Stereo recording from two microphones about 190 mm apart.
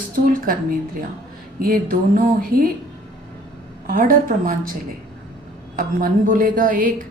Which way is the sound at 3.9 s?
45° right (ahead or behind).